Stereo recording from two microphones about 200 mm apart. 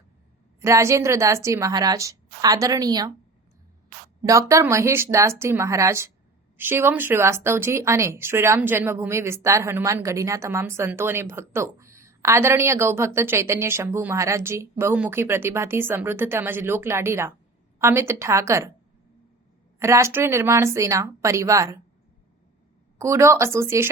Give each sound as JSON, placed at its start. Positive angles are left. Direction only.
{"t": 0.6, "sound": "speech", "side_deg": -15}
{"t": 4.2, "sound": "speech", "side_deg": -15}
{"t": 19.8, "sound": "speech", "side_deg": -15}
{"t": 23.0, "sound": "speech", "side_deg": -15}